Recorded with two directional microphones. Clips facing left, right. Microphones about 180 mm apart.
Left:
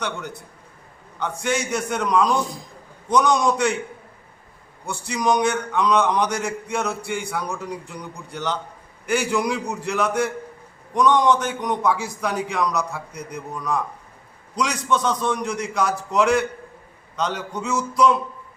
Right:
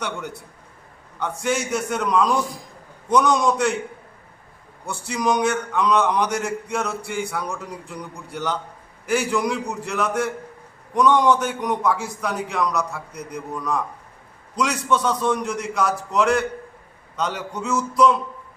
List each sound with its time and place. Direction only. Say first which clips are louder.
1.2 s a man's voice: even; 5° right (ahead or behind)
4.9 s a man's voice: left 1 dB; 5° right (ahead or behind)